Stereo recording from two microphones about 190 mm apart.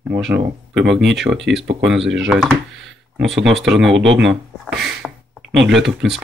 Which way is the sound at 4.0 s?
75° right (ahead or behind).